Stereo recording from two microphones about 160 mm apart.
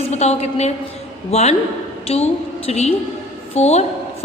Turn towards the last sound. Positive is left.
turn(degrees=40)  # may be behind; listen again after turning